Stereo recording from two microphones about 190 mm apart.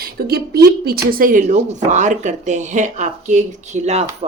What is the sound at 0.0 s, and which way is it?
A woman's voice, 55° right (ahead or behind).